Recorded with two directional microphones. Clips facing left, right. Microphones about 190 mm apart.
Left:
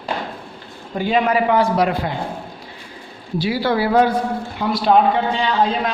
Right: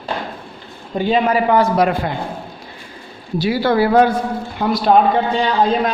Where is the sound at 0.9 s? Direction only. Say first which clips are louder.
Right 2 dB; 30° right (ahead or behind).